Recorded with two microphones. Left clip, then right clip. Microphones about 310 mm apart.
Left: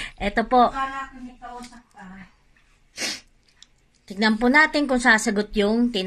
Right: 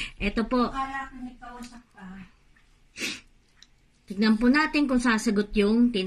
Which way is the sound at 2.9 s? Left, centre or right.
Centre.